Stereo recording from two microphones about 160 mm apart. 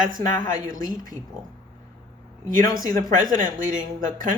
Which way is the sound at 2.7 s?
60° right (ahead or behind).